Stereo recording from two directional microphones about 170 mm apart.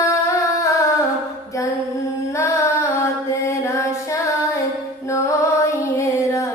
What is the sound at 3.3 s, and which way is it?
Music, 15° left (ahead or behind).